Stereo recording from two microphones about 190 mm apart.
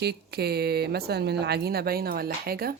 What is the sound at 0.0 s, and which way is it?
Speech, 60° right (ahead or behind).